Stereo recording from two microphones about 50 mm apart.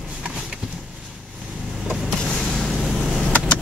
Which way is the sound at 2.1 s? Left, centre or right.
Centre.